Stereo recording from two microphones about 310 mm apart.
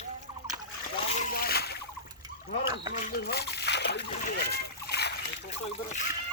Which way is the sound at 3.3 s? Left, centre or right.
Left.